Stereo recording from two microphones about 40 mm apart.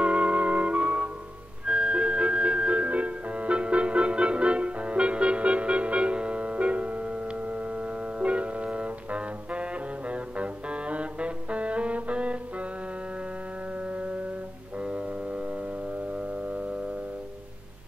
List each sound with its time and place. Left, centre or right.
0.0 s music: right
13.9 s music: right